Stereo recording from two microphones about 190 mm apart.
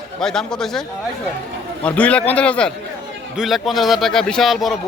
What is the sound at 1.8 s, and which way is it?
A man's voice, 5° left (ahead or behind).